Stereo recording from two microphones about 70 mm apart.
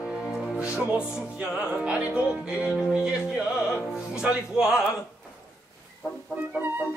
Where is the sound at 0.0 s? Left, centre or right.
Centre.